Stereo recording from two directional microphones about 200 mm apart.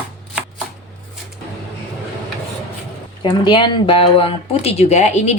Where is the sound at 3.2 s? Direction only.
25° left (ahead or behind).